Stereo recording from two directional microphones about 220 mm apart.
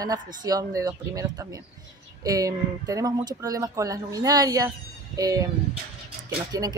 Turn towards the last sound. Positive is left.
turn(degrees=-15)  # may be behind; listen again after turning